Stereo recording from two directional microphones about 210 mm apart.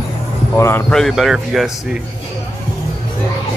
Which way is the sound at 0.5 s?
10° left (ahead or behind).